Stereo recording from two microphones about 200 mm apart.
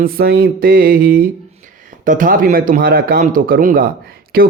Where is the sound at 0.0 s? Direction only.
50° right (ahead or behind).